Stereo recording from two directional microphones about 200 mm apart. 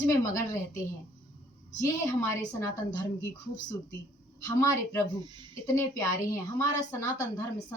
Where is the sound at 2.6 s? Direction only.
15° left (ahead or behind).